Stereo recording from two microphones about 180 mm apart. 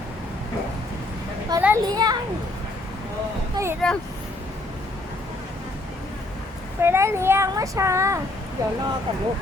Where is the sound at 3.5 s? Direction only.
15° right (ahead or behind).